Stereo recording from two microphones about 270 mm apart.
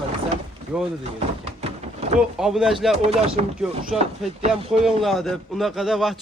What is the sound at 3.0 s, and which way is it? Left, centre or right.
Speech, right.